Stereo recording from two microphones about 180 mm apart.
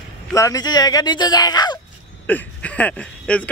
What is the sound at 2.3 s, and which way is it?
Speech, 10° left (ahead or behind).